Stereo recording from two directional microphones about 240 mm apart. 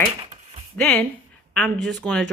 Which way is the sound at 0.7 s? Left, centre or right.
Centre.